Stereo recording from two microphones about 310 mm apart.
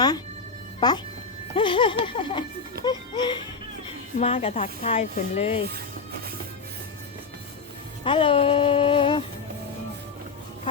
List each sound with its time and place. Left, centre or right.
0.8 s speech: centre
1.5 s music: centre
4.2 s speech: centre
8.0 s music: centre